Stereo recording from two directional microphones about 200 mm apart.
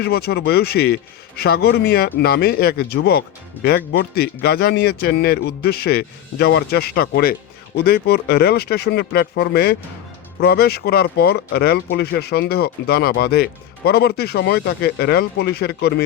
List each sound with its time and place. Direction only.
0.0 s speech: 50° left (ahead or behind)